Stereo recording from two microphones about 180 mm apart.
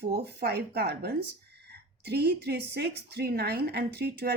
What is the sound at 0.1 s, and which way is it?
A woman's voice, 65° right (ahead or behind).